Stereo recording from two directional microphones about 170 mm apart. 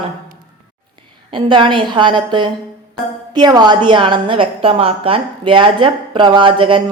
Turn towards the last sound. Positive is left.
turn(degrees=-30)  # may be behind; listen again after turning